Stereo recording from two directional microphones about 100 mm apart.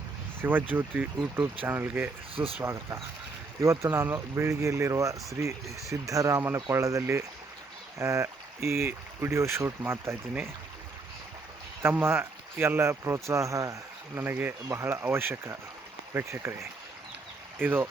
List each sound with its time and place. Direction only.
0.4 s speech: 20° right (ahead or behind)
11.8 s speech: 20° right (ahead or behind)
14.2 s speech: 20° right (ahead or behind)